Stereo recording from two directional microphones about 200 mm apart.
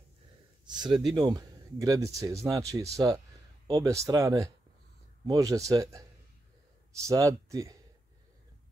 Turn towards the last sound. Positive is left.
turn(degrees=-15)  # may be behind; listen again after turning